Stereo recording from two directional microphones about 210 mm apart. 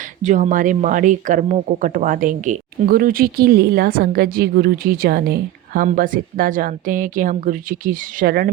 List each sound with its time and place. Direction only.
0.2 s speech: 35° right (ahead or behind)